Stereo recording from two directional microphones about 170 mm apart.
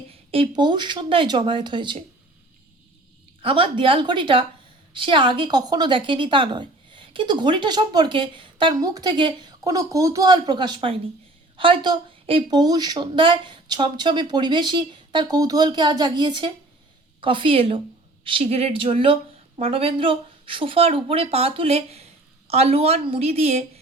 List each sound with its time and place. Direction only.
0.3 s a woman's voice: 30° right (ahead or behind)
3.4 s a woman's voice: 30° right (ahead or behind)